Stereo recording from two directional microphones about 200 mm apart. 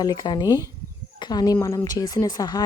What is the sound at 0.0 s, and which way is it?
Speech, 20° left (ahead or behind).